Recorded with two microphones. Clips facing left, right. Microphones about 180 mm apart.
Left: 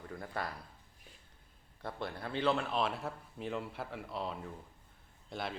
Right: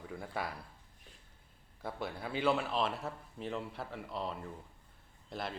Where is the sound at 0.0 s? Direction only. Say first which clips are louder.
Right 1 dB; 5° right (ahead or behind).